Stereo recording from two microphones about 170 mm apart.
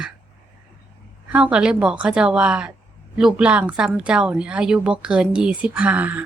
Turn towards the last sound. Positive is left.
turn(degrees=-10)  # may be behind; listen again after turning